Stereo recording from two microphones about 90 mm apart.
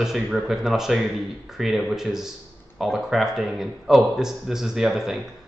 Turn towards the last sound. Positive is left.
turn(degrees=-5)  # may be behind; listen again after turning